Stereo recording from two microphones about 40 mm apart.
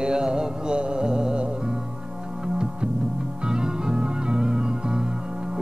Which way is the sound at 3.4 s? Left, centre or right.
Centre.